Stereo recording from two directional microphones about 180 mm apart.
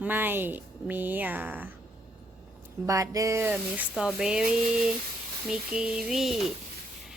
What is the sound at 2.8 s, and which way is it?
A woman's voice, 20° right (ahead or behind).